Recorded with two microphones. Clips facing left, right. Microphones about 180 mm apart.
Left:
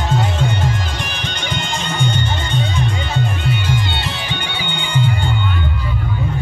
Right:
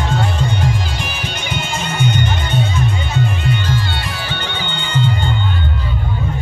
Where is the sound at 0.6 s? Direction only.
5° right (ahead or behind).